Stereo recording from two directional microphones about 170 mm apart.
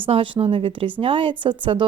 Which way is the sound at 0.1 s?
30° right (ahead or behind).